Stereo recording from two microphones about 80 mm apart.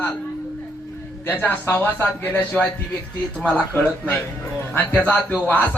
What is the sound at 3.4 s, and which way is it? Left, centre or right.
Music, centre.